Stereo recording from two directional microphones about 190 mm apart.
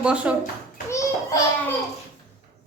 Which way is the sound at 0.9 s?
15° left (ahead or behind).